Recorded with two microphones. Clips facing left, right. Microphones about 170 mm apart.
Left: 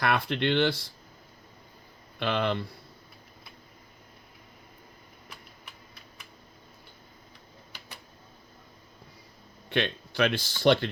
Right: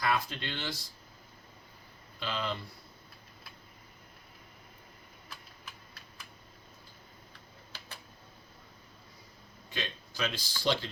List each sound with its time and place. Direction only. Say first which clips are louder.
0.0 s speech: left 6 dB; 65° left (ahead or behind)
2.1 s speech: left 8 dB; 65° left (ahead or behind)
9.6 s speech: left 11 dB; 65° left (ahead or behind)